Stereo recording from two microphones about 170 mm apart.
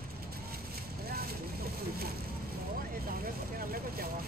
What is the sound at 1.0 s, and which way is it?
Vehicle, 60° right (ahead or behind).